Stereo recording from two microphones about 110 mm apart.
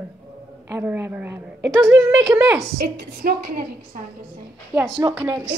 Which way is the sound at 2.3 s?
10° right (ahead or behind).